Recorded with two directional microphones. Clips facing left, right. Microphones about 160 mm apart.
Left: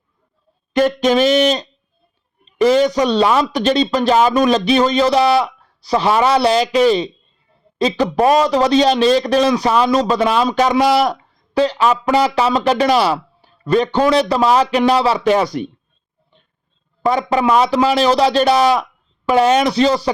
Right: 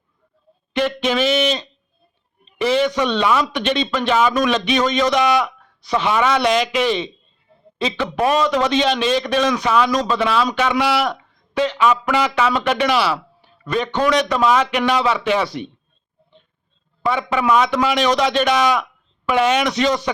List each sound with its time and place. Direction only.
0.7 s a man's voice: 45° left (ahead or behind)
17.0 s a man's voice: 40° left (ahead or behind)